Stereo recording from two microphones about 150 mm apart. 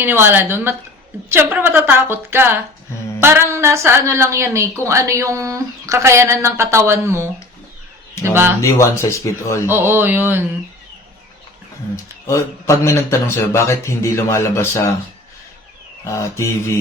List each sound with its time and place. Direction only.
0.0 s a woman's voice: 15° right (ahead or behind)
8.3 s a woman's voice: 15° right (ahead or behind)
8.6 s speech: 20° left (ahead or behind)
9.6 s a woman's voice: 15° right (ahead or behind)
12.3 s speech: 20° left (ahead or behind)
16.0 s speech: 20° left (ahead or behind)